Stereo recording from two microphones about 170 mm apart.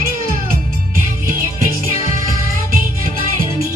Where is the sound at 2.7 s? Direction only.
55° right (ahead or behind).